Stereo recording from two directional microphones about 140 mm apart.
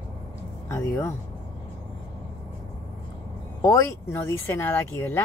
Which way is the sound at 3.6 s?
20° left (ahead or behind).